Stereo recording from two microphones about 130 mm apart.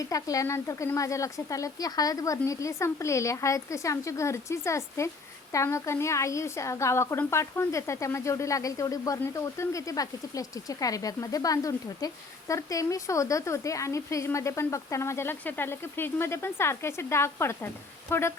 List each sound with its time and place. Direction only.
0.0 s speech: 25° left (ahead or behind)